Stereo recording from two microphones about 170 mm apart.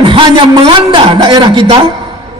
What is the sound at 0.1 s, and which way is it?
A man's voice, 30° right (ahead or behind).